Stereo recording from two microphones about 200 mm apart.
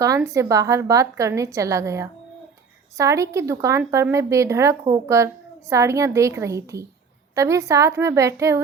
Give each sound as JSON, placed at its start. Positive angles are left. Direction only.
{"t": 0.2, "sound": "speech", "side_deg": -15}